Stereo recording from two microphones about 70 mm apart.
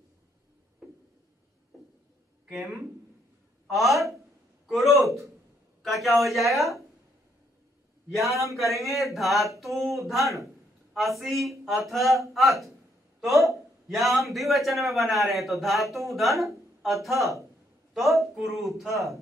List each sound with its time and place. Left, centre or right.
2.4 s a sound: centre
3.6 s speech: centre
4.6 s a sound: centre
5.8 s speech: centre
8.1 s a man's voice: centre
17.2 s a man's voice: right
17.9 s a man's voice: centre
18.9 s a man's voice: right